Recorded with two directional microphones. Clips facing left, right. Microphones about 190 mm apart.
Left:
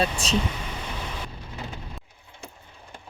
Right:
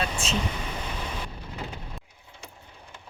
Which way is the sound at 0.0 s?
35° left (ahead or behind).